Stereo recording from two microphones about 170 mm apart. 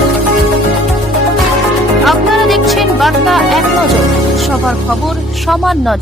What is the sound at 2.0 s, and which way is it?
Music, centre (ahead or behind).